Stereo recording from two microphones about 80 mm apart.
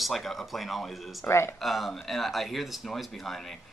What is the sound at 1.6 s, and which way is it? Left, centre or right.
Speech, centre.